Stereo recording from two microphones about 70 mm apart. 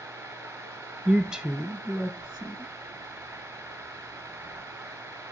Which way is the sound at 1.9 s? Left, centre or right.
Right.